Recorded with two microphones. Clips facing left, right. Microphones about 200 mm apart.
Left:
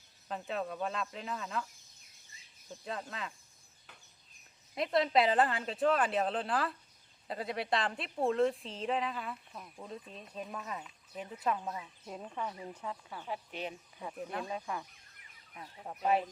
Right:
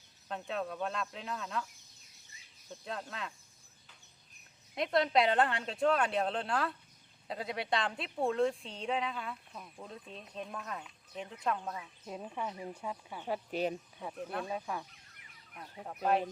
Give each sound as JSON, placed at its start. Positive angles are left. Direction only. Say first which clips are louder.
{"t": 0.3, "sound": "a woman's voice", "louder": "even", "side_deg": 0}
{"t": 2.6, "sound": "a woman's voice", "louder": "left 1 dB", "side_deg": 0}
{"t": 4.7, "sound": "a woman's voice", "louder": "even", "side_deg": 0}
{"t": 12.1, "sound": "speech", "louder": "right 1 dB", "side_deg": -10}
{"t": 13.2, "sound": "speech", "louder": "right 7 dB", "side_deg": -40}
{"t": 14.0, "sound": "a woman's voice", "louder": "left 1 dB", "side_deg": 0}